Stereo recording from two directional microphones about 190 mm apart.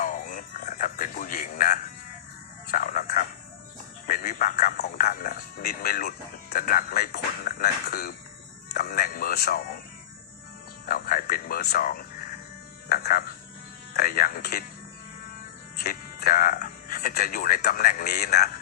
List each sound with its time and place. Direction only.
0.0 s music: 45° left (ahead or behind)
2.6 s a sound: 45° left (ahead or behind)
4.0 s a man's voice: 50° left (ahead or behind)
10.8 s speech: 50° left (ahead or behind)
15.8 s speech: 50° left (ahead or behind)